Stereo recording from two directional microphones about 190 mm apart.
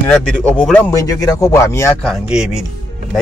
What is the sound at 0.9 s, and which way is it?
Speech, 20° left (ahead or behind).